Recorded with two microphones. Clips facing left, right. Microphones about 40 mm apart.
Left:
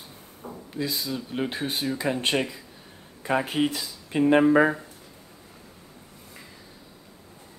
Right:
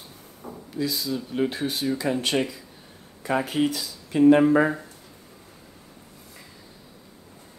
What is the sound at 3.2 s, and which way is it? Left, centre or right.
Speech, left.